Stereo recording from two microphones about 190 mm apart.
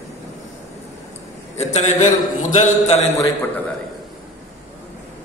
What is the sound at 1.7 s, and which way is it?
Speech, 40° left (ahead or behind).